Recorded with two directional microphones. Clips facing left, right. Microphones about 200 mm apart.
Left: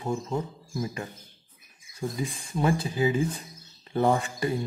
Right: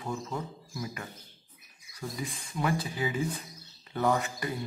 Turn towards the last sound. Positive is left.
turn(degrees=30)  # may be behind; listen again after turning